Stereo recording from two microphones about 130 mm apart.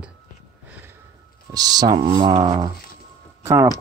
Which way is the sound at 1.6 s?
30° right (ahead or behind).